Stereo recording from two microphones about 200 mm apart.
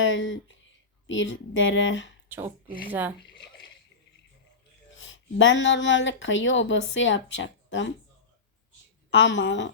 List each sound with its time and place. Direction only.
0.0 s speech: 75° left (ahead or behind)
2.3 s speech: 10° right (ahead or behind)
4.9 s speech: 70° left (ahead or behind)
9.1 s a woman's voice: 65° left (ahead or behind)